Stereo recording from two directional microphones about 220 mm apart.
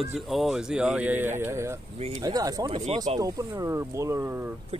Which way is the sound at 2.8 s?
30° right (ahead or behind).